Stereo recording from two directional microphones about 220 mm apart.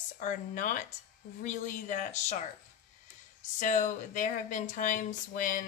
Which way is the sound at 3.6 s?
35° left (ahead or behind).